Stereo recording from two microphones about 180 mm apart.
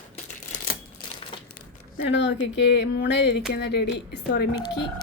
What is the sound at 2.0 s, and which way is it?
Speech, 80° left.